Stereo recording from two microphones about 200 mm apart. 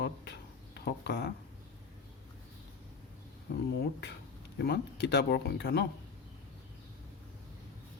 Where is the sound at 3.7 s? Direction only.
55° left (ahead or behind).